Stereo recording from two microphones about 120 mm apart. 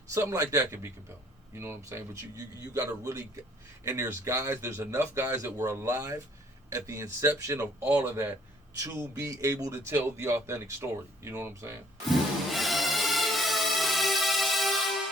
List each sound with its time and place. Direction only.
0.1 s speech: 25° right (ahead or behind)
12.5 s music: centre (ahead or behind)